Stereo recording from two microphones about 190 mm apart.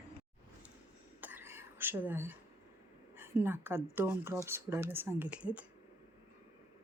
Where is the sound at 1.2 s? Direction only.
10° right (ahead or behind).